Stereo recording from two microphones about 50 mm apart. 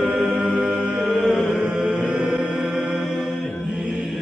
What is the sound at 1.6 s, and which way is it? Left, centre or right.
Chant, right.